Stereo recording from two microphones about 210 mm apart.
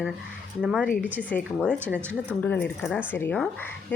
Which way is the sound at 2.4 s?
10° left (ahead or behind).